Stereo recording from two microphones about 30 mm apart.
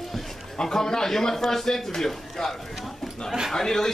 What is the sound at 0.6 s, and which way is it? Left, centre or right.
A man's voice, centre.